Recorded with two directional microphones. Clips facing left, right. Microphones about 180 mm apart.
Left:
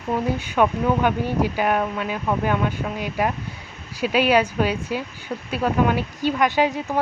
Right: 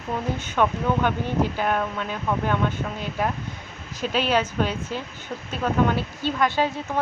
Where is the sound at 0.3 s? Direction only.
10° left (ahead or behind).